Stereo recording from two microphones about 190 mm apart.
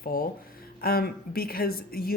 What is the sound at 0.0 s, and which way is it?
Speech, 50° left (ahead or behind).